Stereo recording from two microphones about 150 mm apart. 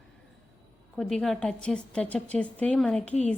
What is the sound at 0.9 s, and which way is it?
A woman's voice, centre (ahead or behind).